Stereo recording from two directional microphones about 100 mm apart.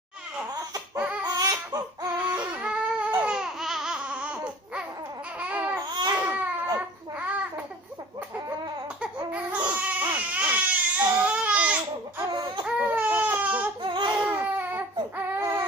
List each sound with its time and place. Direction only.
0.9 s a sound: 10° right (ahead or behind)
1.2 s laughter: 40° right (ahead or behind)
2.0 s baby cry: 15° right (ahead or behind)
3.2 s laughter: 10° right (ahead or behind)
5.4 s babbling: 15° right (ahead or behind)
5.9 s baby cry: 45° right (ahead or behind)
6.2 s baby cry: 15° right (ahead or behind)
9.0 s a sound: 10° right (ahead or behind)
9.8 s baby cry: 15° right (ahead or behind)
12.2 s baby cry: 45° right (ahead or behind)
12.6 s baby cry: 15° right (ahead or behind)
13.8 s baby cry: 50° right (ahead or behind)
14.2 s baby cry: 15° right (ahead or behind)